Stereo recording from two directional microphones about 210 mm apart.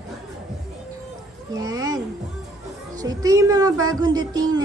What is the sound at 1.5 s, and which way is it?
Speech, 20° right (ahead or behind).